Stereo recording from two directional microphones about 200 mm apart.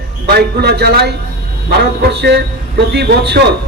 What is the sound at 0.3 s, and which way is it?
A man's voice, 55° right (ahead or behind).